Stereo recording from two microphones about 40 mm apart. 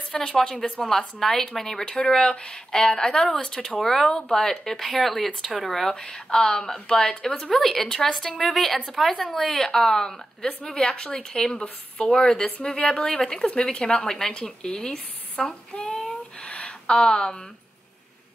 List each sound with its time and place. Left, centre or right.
0.1 s speech: centre
5.9 s speech: left
16.3 s a sound: left